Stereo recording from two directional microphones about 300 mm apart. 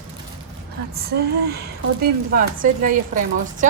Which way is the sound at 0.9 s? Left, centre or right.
Right.